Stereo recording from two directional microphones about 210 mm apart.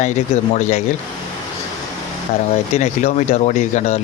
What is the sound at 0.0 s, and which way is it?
Speech, 35° left (ahead or behind).